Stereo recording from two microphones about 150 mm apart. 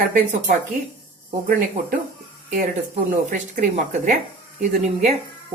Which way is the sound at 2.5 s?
55° right (ahead or behind).